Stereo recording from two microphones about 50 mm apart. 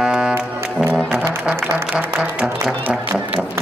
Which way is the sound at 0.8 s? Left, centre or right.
Centre.